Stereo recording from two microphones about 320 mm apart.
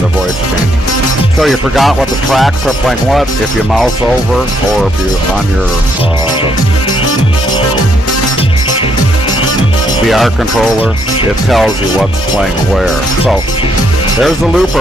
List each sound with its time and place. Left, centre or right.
1.4 s speech: centre
10.0 s speech: centre